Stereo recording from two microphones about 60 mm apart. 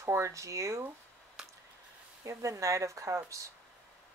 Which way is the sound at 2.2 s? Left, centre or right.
Right.